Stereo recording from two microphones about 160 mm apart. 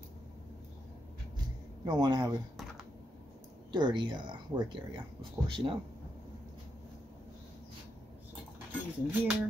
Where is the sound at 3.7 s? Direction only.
30° right (ahead or behind).